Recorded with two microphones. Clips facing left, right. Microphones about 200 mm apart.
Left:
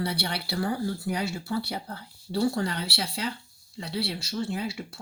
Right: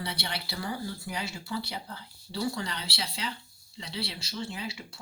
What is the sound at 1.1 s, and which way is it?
Speech, 50° left (ahead or behind).